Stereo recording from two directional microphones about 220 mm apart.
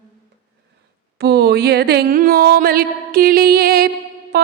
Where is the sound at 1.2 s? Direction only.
50° right (ahead or behind).